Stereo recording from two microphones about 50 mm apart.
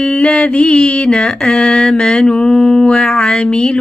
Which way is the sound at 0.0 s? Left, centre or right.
Left.